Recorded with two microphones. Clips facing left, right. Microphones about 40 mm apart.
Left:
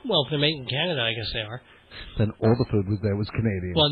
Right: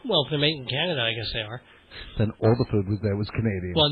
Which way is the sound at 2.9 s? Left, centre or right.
Centre.